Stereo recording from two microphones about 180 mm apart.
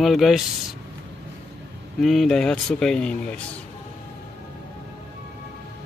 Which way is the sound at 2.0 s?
Centre (ahead or behind).